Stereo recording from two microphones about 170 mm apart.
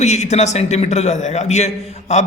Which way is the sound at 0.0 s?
40° left (ahead or behind).